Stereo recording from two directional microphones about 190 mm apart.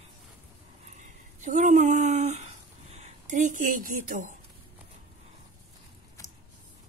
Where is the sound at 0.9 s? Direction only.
40° right (ahead or behind).